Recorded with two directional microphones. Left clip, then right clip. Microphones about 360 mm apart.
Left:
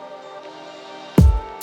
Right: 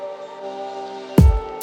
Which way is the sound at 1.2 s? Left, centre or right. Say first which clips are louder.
Right 1 dB; centre.